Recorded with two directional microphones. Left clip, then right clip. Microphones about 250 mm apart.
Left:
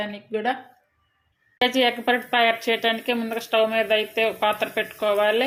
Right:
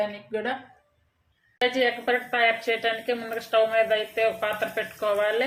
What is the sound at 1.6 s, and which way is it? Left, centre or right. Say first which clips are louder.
A woman's voice: left 3 dB; left.